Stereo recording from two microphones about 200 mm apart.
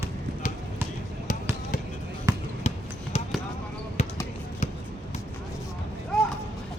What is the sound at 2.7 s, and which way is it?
Basketball bounce, 30° left (ahead or behind).